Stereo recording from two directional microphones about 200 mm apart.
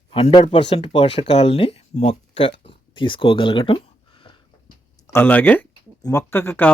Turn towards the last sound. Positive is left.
turn(degrees=10)  # may be behind; listen again after turning